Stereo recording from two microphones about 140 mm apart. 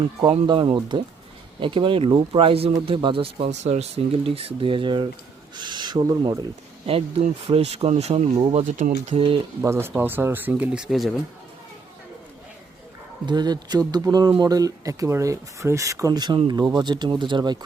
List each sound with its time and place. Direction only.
0.3 s speech: 35° right (ahead or behind)
6.8 s speech: 45° right (ahead or behind); by 9.1 s 65° right (ahead or behind)
9.1 s speech: 40° right (ahead or behind)
9.6 s speech: 15° right (ahead or behind); by 11.2 s centre (ahead or behind)
13.2 s speech: 30° right (ahead or behind)